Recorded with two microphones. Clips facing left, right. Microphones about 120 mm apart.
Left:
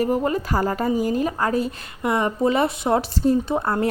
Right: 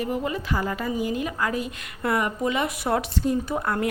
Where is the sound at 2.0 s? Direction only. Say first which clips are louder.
Left 4 dB; 25° left (ahead or behind).